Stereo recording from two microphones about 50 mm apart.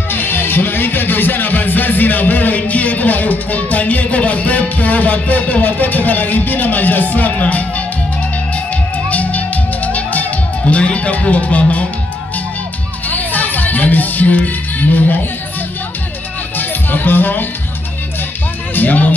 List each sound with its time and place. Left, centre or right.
0.1 s speech: left
8.9 s music: left
10.6 s speech: left
13.1 s music: left
16.5 s music: left
18.8 s speech: left